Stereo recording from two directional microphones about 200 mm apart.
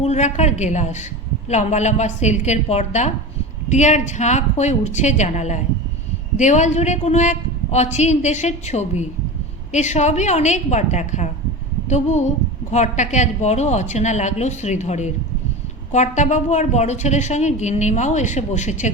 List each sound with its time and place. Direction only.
0.0 s a woman's voice: 35° left (ahead or behind)